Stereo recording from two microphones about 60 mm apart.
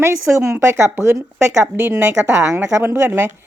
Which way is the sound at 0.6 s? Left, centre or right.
Right.